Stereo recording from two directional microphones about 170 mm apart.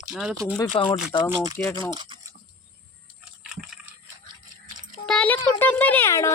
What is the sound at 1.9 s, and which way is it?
Speech, 25° right (ahead or behind).